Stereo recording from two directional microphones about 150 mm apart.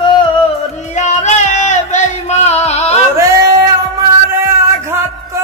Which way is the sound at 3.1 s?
20° right (ahead or behind).